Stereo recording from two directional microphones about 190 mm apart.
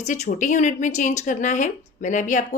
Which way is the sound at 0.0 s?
40° left (ahead or behind).